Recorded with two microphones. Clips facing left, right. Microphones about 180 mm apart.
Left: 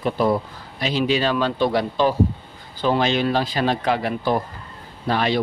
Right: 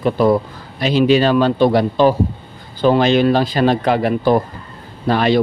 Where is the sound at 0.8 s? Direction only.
75° right (ahead or behind).